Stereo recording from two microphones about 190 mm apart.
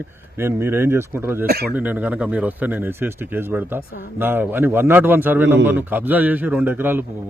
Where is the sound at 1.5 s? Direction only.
55° right (ahead or behind).